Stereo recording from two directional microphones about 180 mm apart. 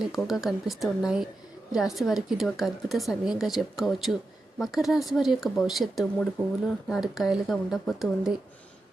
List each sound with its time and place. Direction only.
0.0 s speech: centre (ahead or behind)